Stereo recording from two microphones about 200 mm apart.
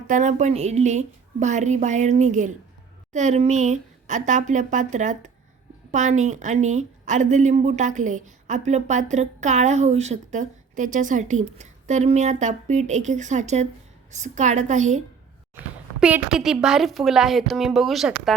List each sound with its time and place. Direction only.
0.1 s a woman's voice: 35° right (ahead or behind)
16.0 s a woman's voice: 5° right (ahead or behind)